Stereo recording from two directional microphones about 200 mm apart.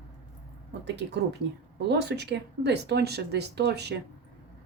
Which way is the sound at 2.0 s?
55° right (ahead or behind).